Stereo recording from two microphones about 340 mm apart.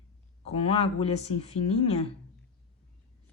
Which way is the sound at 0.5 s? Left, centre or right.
Centre.